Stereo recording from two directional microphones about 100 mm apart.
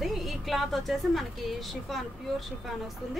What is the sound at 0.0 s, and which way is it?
A woman's voice, centre (ahead or behind).